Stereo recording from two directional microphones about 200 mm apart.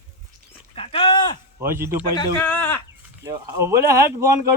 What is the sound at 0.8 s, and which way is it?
Dog, 25° left (ahead or behind).